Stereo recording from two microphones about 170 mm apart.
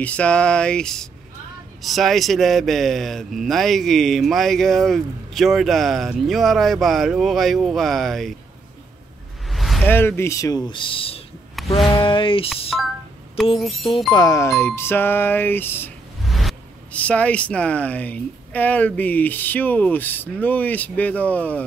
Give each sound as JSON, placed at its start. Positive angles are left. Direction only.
{"t": 0.0, "sound": "speech", "side_deg": 5}
{"t": 9.5, "sound": "a sound", "side_deg": 0}
{"t": 9.8, "sound": "speech", "side_deg": 15}
{"t": 11.6, "sound": "a sound", "side_deg": 0}
{"t": 11.9, "sound": "speech", "side_deg": 30}
{"t": 14.1, "sound": "speech", "side_deg": 20}
{"t": 16.3, "sound": "speech", "side_deg": 0}